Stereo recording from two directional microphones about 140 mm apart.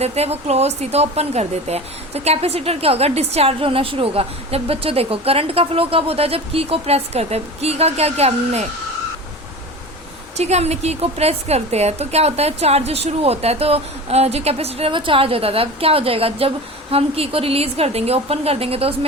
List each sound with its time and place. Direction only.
0.0 s speech: 45° right (ahead or behind)
10.3 s speech: 50° right (ahead or behind)